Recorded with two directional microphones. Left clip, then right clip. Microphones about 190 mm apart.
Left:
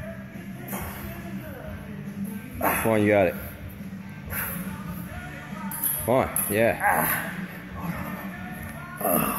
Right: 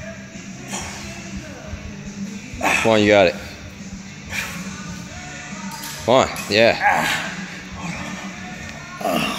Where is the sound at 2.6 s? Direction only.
15° right (ahead or behind).